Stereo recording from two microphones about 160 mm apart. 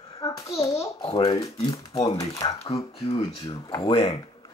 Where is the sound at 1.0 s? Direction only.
30° left (ahead or behind).